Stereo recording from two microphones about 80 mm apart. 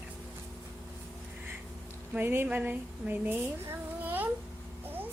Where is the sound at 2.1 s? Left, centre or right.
Right.